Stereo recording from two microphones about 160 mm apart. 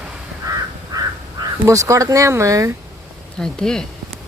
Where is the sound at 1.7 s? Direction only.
20° right (ahead or behind).